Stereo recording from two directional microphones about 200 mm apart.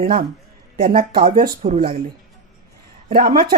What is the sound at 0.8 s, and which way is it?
Speech, 45° right (ahead or behind).